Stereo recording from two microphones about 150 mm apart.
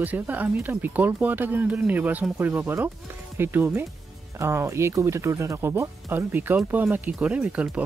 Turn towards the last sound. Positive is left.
turn(degrees=-10)  # may be behind; listen again after turning